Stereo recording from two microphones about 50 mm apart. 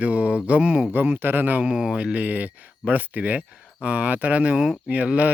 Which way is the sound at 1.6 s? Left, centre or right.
Centre.